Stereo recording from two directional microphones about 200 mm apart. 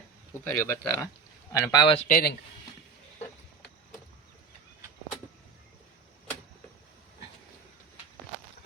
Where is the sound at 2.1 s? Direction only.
45° left (ahead or behind).